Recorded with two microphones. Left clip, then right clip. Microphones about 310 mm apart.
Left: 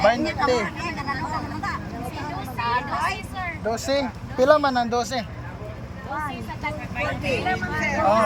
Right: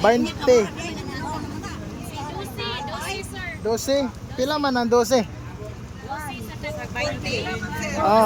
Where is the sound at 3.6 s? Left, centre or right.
Centre.